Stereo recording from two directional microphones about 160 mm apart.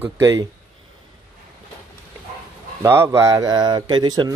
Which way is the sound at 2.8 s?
15° right (ahead or behind).